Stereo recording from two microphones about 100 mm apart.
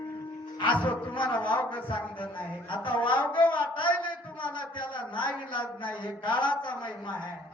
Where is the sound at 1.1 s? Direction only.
55° left (ahead or behind).